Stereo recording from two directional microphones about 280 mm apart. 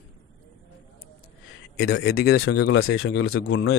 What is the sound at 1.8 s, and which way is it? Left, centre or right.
A man's voice, left.